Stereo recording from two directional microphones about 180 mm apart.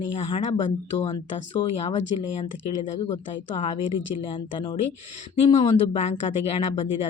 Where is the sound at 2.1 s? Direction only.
25° left (ahead or behind).